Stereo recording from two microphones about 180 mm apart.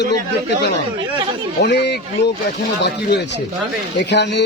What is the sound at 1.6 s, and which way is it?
Speech, 70° left (ahead or behind).